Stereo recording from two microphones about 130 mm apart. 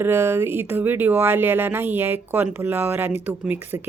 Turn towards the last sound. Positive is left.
turn(degrees=-15)  # may be behind; listen again after turning